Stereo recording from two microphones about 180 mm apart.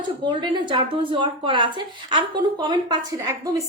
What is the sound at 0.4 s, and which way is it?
A woman's voice, 25° right (ahead or behind).